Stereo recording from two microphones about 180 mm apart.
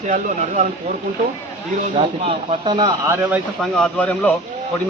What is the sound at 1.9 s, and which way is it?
Speech, 30° right (ahead or behind).